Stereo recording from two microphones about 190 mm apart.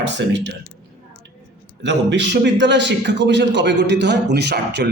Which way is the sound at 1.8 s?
65° right (ahead or behind).